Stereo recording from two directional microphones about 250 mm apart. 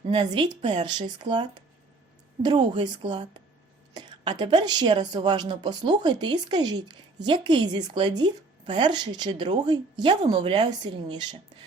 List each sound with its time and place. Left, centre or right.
0.0 s a woman's voice: centre